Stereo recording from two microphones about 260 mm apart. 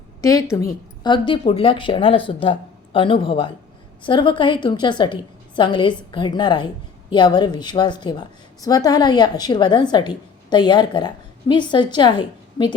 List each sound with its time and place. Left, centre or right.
0.2 s a woman's voice: centre